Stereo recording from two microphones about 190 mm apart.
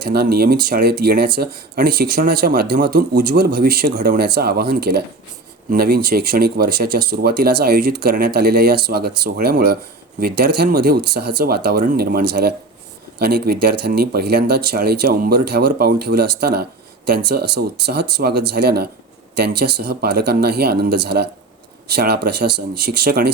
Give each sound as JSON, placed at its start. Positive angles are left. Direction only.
{"t": 0.0, "sound": "speech", "side_deg": -55}